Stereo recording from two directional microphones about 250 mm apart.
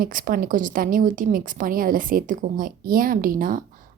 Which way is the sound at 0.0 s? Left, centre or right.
Right.